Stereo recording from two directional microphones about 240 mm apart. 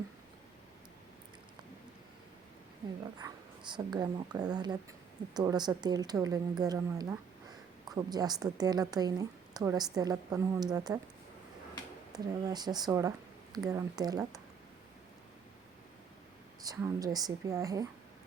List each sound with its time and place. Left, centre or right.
3.2 s a woman's voice: centre
12.1 s a woman's voice: centre
16.6 s a woman's voice: centre